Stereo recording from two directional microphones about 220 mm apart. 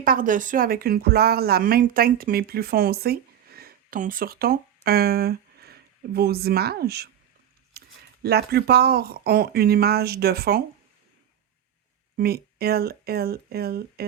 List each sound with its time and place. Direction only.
0.0 s speech: 40° right (ahead or behind)
12.1 s speech: 45° right (ahead or behind)